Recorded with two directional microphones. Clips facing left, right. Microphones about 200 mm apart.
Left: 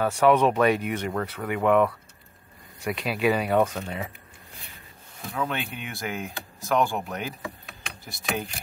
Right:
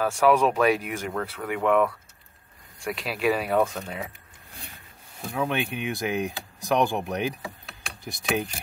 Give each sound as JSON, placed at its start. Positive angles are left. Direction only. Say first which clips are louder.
{"t": 0.0, "sound": "speech", "louder": "left 1 dB", "side_deg": 0}
{"t": 5.3, "sound": "speech", "louder": "right 3 dB", "side_deg": -15}